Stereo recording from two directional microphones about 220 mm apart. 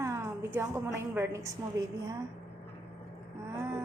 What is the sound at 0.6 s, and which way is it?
Speech, 10° right (ahead or behind).